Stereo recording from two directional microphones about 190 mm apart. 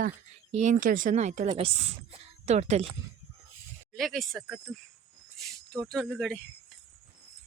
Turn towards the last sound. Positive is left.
turn(degrees=5)  # may be behind; listen again after turning